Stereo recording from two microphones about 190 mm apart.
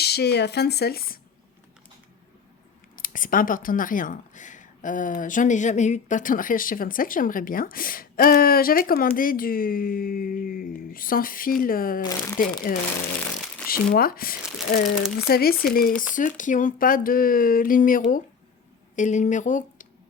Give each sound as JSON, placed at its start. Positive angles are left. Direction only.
{"t": 0.0, "sound": "speech", "side_deg": 60}
{"t": 3.0, "sound": "speech", "side_deg": 45}
{"t": 12.0, "sound": "speech", "side_deg": 15}
{"t": 12.7, "sound": "speech", "side_deg": 50}